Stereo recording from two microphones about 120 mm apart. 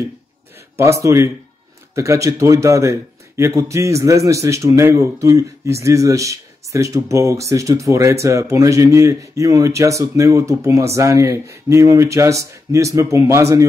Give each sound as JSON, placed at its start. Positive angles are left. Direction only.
{"t": 0.7, "sound": "a man's voice", "side_deg": -25}